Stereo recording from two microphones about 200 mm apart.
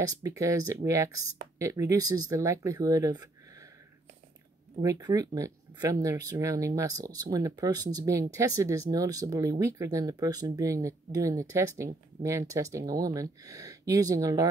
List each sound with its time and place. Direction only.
0.0 s speech: 15° right (ahead or behind)
4.8 s speech: 20° right (ahead or behind)